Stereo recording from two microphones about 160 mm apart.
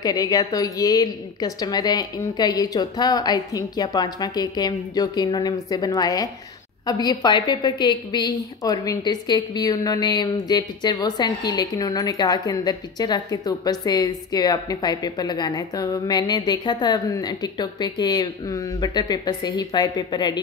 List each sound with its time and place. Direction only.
0.0 s a woman's voice: 25° left (ahead or behind)